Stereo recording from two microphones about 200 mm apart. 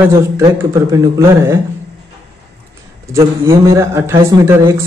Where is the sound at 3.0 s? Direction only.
15° right (ahead or behind).